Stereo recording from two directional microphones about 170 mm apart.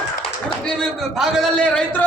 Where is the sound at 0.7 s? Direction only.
Centre (ahead or behind).